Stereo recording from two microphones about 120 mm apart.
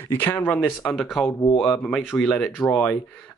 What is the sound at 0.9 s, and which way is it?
Speech, centre (ahead or behind).